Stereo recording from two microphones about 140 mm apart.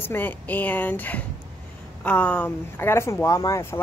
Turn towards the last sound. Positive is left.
turn(degrees=20)  # may be behind; listen again after turning